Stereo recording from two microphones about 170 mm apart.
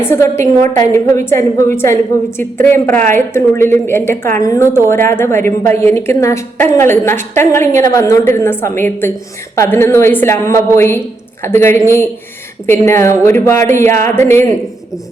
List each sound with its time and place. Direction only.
0.0 s a woman's voice: 15° left (ahead or behind)